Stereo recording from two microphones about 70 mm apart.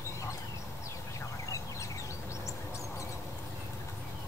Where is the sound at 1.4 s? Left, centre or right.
Left.